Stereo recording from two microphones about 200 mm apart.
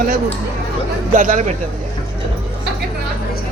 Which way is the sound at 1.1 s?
40° right (ahead or behind).